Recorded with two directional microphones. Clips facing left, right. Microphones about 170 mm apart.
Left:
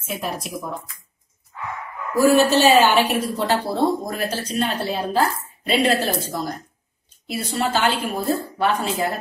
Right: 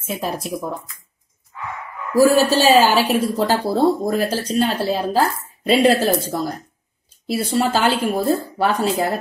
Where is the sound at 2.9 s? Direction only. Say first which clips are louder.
Right 2 dB; 35° right (ahead or behind).